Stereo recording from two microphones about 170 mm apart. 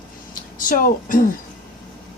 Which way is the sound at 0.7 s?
55° left (ahead or behind).